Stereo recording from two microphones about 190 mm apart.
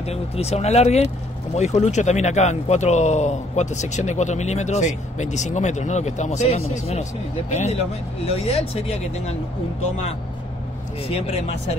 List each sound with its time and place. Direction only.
0.0 s speech: 35° left (ahead or behind)
11.1 s speech: 30° left (ahead or behind)